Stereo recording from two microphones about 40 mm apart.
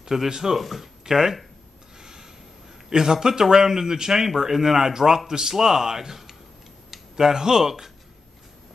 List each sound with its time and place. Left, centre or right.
0.0 s speech: centre
2.0 s a sound: centre
2.9 s speech: centre